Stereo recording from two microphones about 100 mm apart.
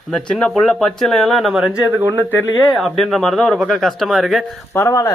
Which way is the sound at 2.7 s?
Centre (ahead or behind).